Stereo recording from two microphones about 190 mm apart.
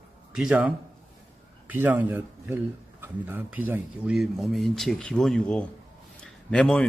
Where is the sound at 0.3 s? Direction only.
5° right (ahead or behind).